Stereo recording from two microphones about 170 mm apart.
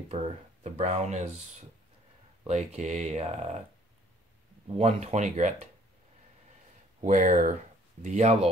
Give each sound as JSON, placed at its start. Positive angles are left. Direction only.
{"t": 0.7, "sound": "speech", "side_deg": -40}
{"t": 2.4, "sound": "speech", "side_deg": -40}
{"t": 4.6, "sound": "speech", "side_deg": -35}
{"t": 7.0, "sound": "speech", "side_deg": -45}